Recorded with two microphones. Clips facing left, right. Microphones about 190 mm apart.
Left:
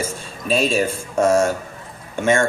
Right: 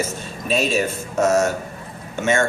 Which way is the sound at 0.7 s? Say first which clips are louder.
Left 1 dB; 30° left (ahead or behind).